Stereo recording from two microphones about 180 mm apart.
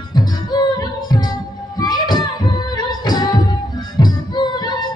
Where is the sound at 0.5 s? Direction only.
25° left (ahead or behind).